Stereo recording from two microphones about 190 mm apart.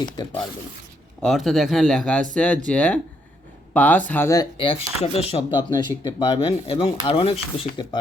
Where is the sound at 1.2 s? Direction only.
Centre (ahead or behind).